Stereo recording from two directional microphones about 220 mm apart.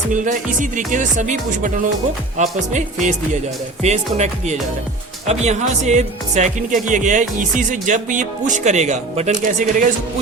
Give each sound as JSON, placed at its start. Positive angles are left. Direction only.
{"t": 0.1, "sound": "speech", "side_deg": -35}